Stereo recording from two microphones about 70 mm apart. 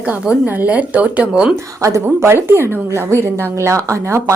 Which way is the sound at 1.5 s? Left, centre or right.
Right.